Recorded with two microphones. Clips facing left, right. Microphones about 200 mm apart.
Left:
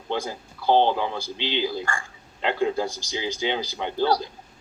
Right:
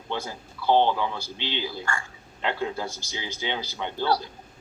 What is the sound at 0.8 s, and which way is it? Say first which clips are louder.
Speech: left 2 dB; 35° left (ahead or behind).